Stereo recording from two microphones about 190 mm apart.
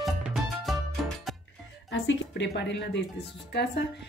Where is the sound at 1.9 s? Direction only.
70° left (ahead or behind).